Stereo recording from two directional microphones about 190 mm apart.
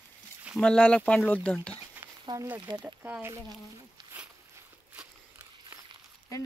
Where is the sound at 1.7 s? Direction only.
10° right (ahead or behind).